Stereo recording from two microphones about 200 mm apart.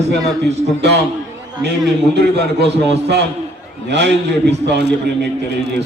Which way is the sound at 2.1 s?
55° right (ahead or behind).